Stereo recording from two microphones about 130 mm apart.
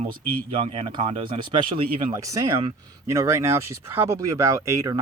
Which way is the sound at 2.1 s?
25° right (ahead or behind).